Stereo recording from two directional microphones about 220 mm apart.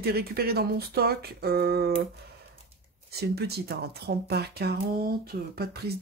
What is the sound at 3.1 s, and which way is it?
Speech, 45° right (ahead or behind).